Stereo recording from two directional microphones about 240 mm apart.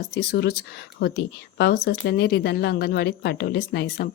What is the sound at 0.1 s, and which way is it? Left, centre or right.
A woman's voice, left.